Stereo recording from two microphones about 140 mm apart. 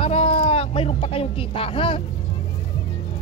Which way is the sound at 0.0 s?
40° left (ahead or behind).